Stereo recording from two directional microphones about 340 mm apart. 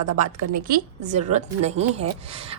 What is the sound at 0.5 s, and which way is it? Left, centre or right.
A woman's voice, right.